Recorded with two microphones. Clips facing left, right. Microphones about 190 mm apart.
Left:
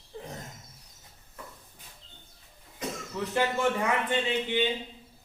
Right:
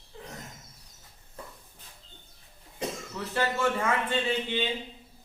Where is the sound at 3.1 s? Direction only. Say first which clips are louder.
Left 2 dB; 15° left (ahead or behind).